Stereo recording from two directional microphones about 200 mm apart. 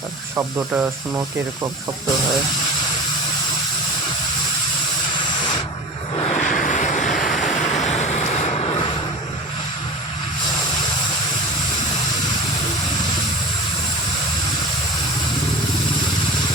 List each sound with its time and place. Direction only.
0.3 s speech: 10° right (ahead or behind)
6.1 s vehicle: 35° left (ahead or behind)